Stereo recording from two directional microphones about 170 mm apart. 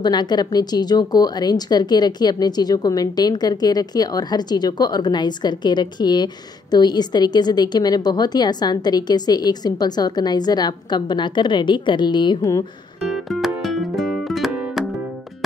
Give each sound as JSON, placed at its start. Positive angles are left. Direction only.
{"t": 0.0, "sound": "speech", "side_deg": 25}
{"t": 13.1, "sound": "music", "side_deg": 0}